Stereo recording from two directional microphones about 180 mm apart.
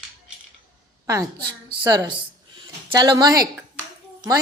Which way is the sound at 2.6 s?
25° right (ahead or behind).